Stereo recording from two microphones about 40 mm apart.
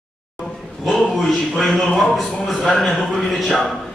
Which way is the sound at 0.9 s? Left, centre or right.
Centre.